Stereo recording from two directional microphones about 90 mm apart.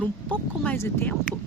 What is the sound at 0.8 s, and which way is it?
Speech, 25° left (ahead or behind).